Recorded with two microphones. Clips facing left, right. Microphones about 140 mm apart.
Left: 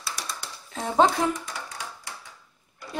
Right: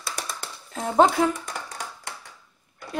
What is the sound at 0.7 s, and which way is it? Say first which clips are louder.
Speech: right 2 dB; centre (ahead or behind).